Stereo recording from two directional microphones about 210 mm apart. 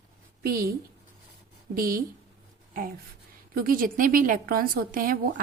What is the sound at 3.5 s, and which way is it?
A woman's voice, 45° right (ahead or behind).